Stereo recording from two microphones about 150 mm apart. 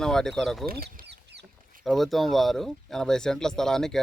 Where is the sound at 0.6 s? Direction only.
85° right.